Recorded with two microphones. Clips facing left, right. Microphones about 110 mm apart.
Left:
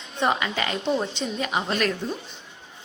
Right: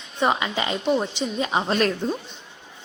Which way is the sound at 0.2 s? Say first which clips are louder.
Right 2 dB; 20° right (ahead or behind).